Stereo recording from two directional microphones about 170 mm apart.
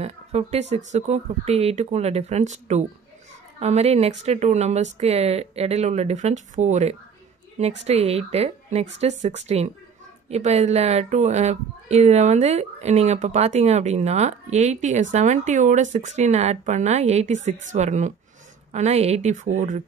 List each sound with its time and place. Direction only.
0.0 s speech: 40° right (ahead or behind)